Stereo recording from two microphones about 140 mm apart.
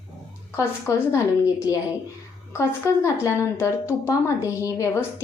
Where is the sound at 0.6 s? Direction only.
20° left (ahead or behind).